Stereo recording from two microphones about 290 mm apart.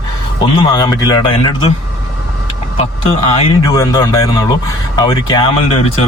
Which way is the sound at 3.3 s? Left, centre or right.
Centre.